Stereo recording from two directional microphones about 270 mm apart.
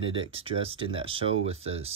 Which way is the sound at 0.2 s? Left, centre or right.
Right.